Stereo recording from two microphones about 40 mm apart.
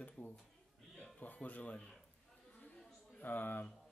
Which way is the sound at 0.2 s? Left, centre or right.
Left.